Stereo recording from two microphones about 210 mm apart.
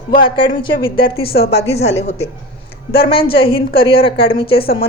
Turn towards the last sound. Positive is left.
turn(degrees=45)  # may be behind; listen again after turning